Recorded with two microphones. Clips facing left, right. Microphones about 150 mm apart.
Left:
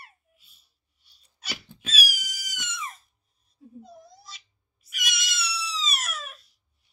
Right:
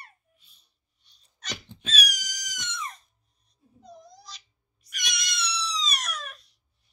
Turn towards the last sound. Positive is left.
turn(degrees=0)  # may be behind; listen again after turning